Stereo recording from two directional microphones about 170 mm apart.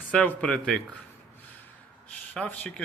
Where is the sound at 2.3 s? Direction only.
5° left (ahead or behind).